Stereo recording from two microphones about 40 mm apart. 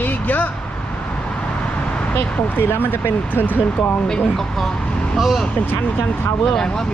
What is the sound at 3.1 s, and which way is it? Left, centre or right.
Speech, left.